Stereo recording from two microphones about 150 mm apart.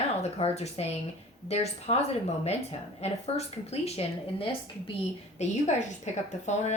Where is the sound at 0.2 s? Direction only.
45° left (ahead or behind).